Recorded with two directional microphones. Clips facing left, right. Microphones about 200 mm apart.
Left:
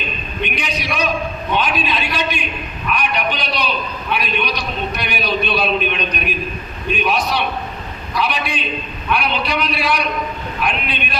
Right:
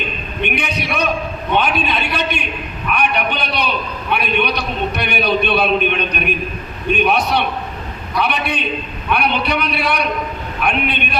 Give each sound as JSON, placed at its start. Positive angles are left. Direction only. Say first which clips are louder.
{"t": 0.4, "sound": "a man's voice", "louder": "right 3 dB", "side_deg": -60}